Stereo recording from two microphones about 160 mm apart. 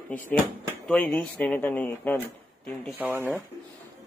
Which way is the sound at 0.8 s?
5° left (ahead or behind).